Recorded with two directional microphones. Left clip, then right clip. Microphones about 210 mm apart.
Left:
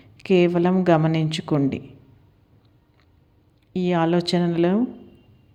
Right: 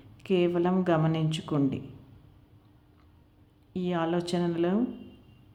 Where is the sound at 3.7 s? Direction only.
25° left (ahead or behind).